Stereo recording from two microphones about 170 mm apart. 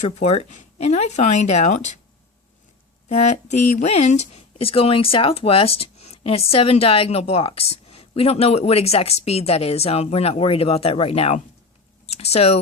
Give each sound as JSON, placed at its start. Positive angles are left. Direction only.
{"t": 0.0, "sound": "speech", "side_deg": 40}
{"t": 3.1, "sound": "speech", "side_deg": 40}